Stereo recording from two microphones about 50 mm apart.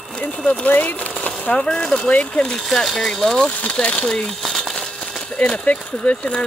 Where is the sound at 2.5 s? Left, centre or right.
Centre.